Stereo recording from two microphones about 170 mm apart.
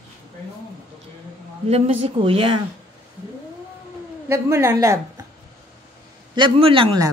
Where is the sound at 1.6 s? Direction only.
35° right (ahead or behind).